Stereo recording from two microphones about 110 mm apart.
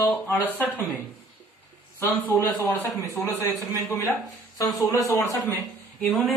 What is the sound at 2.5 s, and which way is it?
Speech, 35° left (ahead or behind).